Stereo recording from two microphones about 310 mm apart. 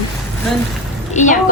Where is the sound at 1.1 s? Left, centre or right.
Left.